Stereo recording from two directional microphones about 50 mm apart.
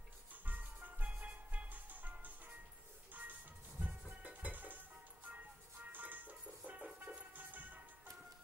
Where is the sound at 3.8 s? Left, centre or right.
Right.